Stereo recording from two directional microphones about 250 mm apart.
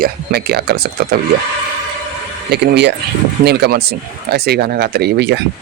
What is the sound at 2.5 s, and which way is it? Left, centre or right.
Speech, right.